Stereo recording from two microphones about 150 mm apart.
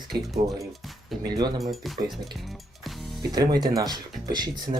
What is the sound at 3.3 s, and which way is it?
Speech, 25° right (ahead or behind).